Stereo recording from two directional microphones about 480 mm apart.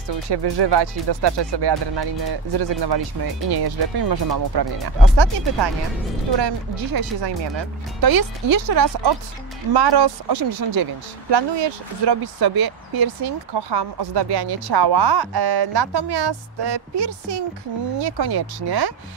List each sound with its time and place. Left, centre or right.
0.3 s a woman's voice: right